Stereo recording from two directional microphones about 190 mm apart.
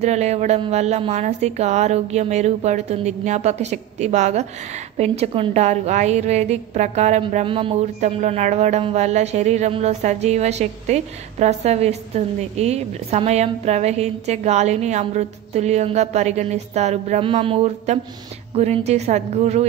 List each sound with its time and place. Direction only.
0.0 s a woman's voice: 35° right (ahead or behind)